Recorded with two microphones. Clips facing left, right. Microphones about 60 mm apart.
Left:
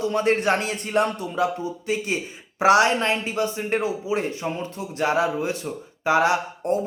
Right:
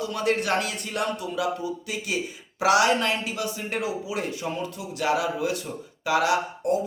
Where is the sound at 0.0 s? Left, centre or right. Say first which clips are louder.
Left 4 dB; left.